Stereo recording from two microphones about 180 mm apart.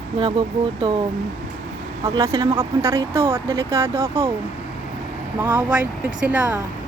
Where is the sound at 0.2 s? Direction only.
25° right (ahead or behind).